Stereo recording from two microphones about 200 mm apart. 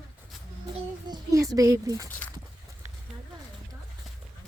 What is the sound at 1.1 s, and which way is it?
Speech, 15° right (ahead or behind).